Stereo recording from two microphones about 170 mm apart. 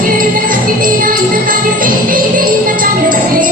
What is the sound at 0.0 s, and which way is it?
Music, 55° right (ahead or behind).